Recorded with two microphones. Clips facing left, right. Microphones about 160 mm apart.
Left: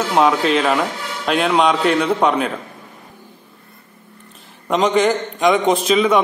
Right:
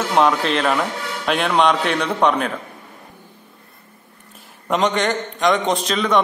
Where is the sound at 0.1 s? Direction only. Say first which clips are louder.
Left 2 dB; 5° left (ahead or behind).